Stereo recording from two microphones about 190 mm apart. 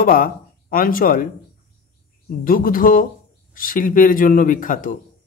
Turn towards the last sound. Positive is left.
turn(degrees=45)  # may be behind; listen again after turning